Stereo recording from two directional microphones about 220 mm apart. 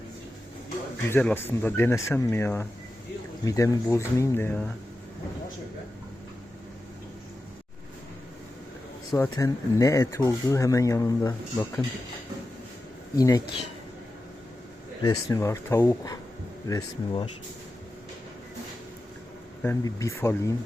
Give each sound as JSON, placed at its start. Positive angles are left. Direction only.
{"t": 1.0, "sound": "speech", "side_deg": 10}
{"t": 9.1, "sound": "speech", "side_deg": 15}
{"t": 13.1, "sound": "speech", "side_deg": 15}
{"t": 15.0, "sound": "speech", "side_deg": 15}
{"t": 19.6, "sound": "speech", "side_deg": 15}